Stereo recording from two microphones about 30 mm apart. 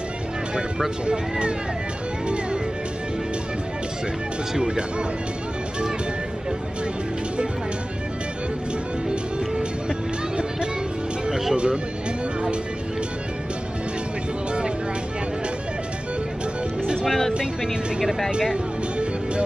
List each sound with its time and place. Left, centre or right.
1.0 s speech: right
4.6 s speech: right
11.2 s music: centre
11.5 s music: right